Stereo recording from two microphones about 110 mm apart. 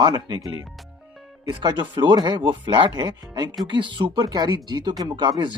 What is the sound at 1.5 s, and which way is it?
Speech, 40° right (ahead or behind).